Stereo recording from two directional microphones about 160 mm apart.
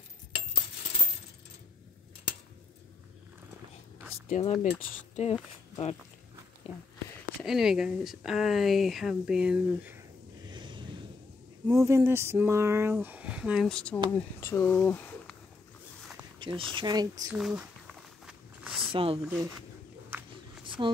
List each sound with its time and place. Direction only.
4.3 s speech: 45° left (ahead or behind)
7.4 s speech: 5° right (ahead or behind)
10.4 s a sound: 30° right (ahead or behind)
11.6 s speech: 20° right (ahead or behind)
13.7 s speech: 5° left (ahead or behind)
16.0 s a sound: centre (ahead or behind)
16.3 s a sound: 30° right (ahead or behind)
16.7 s speech: 25° right (ahead or behind)
17.3 s walk: 5° right (ahead or behind)
18.9 s speech: 35° right (ahead or behind)
19.2 s speech: 10° right (ahead or behind)
20.6 s a sound: 30° right (ahead or behind)